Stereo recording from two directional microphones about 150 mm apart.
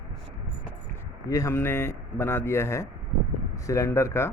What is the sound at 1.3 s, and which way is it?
Speech, 20° left (ahead or behind).